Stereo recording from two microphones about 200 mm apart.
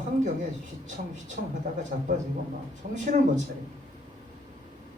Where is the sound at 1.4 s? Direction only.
55° right (ahead or behind).